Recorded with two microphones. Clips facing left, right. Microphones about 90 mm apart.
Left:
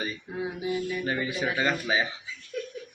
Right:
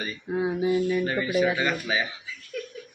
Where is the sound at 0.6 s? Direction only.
50° right (ahead or behind).